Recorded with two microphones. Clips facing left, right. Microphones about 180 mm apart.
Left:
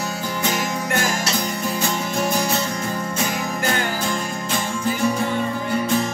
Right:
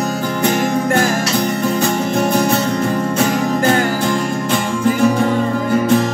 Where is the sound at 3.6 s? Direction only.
45° right (ahead or behind); by 5.4 s 60° right (ahead or behind).